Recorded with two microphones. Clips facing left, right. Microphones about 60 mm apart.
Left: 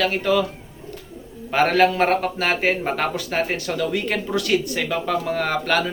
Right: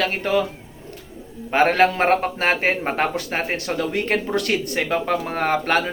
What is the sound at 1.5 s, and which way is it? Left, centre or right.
Speech, right.